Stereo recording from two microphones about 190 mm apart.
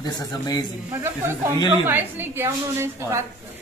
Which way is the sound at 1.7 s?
10° right (ahead or behind).